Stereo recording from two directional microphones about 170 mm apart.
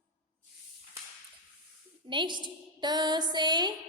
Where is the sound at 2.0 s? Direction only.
30° right (ahead or behind).